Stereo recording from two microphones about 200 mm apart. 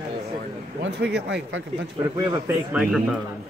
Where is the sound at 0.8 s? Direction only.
60° right (ahead or behind).